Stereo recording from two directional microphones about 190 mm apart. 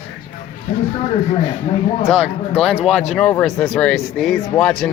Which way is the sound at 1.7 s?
35° left (ahead or behind).